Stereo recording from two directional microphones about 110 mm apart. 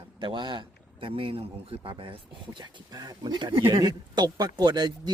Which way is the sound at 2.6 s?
40° right (ahead or behind).